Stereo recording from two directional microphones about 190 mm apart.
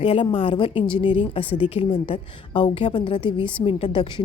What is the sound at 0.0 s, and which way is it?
A woman's voice, 30° left (ahead or behind).